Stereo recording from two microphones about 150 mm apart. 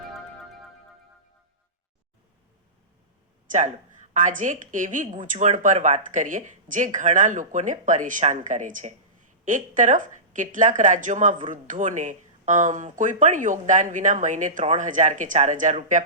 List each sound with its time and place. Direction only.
3.5 s speech: 55° right (ahead or behind)